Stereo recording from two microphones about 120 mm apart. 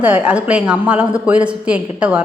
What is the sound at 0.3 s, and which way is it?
A woman's voice, 10° right (ahead or behind).